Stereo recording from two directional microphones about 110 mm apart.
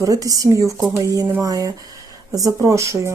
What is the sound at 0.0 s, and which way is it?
Speech, 30° right (ahead or behind).